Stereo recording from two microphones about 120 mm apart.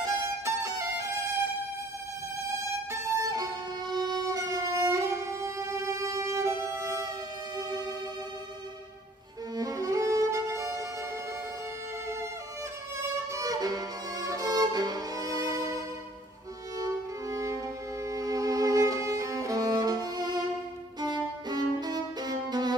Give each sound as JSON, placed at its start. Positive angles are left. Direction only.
{"t": 2.9, "sound": "violin", "side_deg": -30}
{"t": 9.6, "sound": "violin", "side_deg": -30}
{"t": 12.9, "sound": "violin", "side_deg": -25}
{"t": 16.7, "sound": "music", "side_deg": -25}